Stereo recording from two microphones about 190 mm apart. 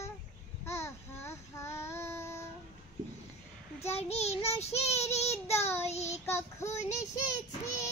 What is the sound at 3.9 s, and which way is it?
Child singing, 35° left (ahead or behind).